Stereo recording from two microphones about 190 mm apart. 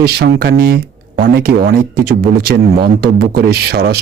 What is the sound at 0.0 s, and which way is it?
A man's voice, 55° right (ahead or behind).